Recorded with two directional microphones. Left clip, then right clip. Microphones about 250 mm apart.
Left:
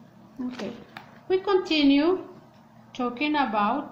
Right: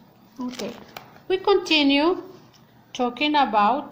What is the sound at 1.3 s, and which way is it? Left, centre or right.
A woman's voice, right.